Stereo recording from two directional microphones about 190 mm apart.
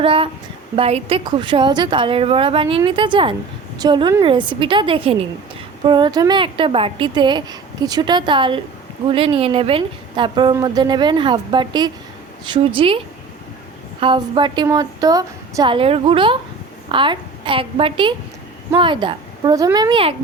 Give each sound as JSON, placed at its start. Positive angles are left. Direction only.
{"t": 0.0, "sound": "a woman's voice", "side_deg": -25}
{"t": 14.0, "sound": "a woman's voice", "side_deg": -25}